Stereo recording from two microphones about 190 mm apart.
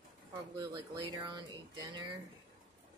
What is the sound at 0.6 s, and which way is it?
Speech, 25° right (ahead or behind).